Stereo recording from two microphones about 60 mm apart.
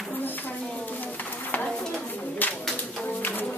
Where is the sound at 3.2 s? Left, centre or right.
Left.